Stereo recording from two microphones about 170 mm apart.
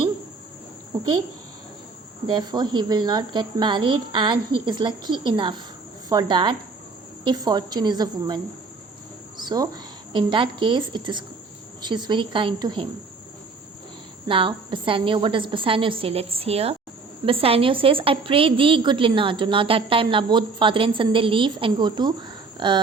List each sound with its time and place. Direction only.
2.2 s a woman's voice: 25° right (ahead or behind)
9.4 s a woman's voice: 25° right (ahead or behind)
14.3 s a woman's voice: 30° right (ahead or behind)